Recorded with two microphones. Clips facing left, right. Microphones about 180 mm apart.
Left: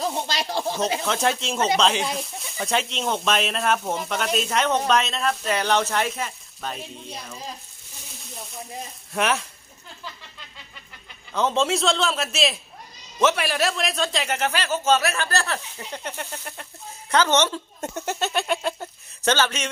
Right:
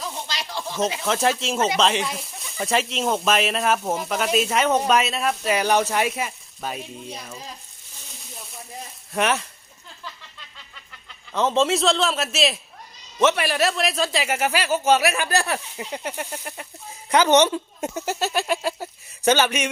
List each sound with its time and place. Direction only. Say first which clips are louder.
0.0 s a sound: left 6 dB; 35° left (ahead or behind)
1.0 s speech: right 2 dB; centre (ahead or behind)
9.1 s speech: right 1 dB; centre (ahead or behind)
11.3 s a man's voice: right 2 dB; centre (ahead or behind)